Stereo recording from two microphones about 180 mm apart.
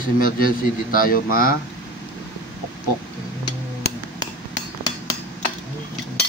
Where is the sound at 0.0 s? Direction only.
50° left (ahead or behind).